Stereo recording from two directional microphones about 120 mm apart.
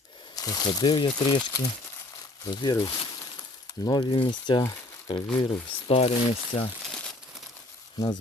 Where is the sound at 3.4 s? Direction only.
30° left (ahead or behind).